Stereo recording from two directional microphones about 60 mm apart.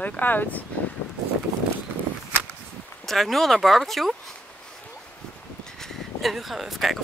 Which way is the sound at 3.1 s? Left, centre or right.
Centre.